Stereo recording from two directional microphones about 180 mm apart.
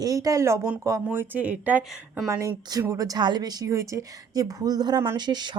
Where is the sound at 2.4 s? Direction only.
20° right (ahead or behind).